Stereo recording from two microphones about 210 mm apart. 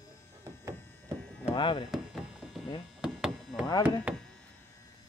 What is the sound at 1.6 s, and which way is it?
Chop, 25° left (ahead or behind).